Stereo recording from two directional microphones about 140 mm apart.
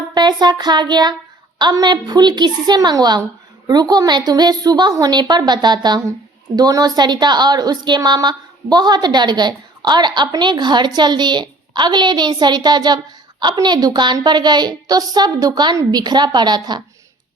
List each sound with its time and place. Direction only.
0.1 s child singing: 30° right (ahead or behind)
1.5 s a woman's voice: 30° right (ahead or behind)